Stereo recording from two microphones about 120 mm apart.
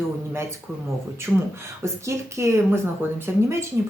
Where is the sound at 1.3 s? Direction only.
Centre (ahead or behind).